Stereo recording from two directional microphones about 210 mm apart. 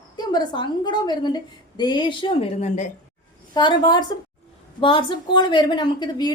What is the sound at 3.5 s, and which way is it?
A woman's voice, 20° left (ahead or behind).